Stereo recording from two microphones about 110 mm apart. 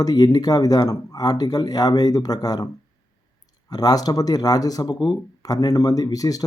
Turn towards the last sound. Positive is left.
turn(degrees=35)  # may be behind; listen again after turning